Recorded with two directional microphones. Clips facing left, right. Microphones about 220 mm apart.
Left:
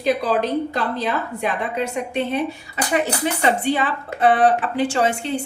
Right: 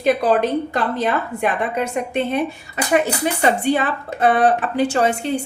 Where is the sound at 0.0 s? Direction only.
55° right (ahead or behind).